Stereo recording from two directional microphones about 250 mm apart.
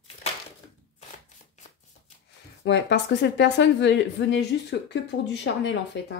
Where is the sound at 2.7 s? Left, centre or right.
Left.